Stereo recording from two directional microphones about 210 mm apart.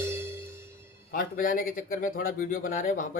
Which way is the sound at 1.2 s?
40° left (ahead or behind).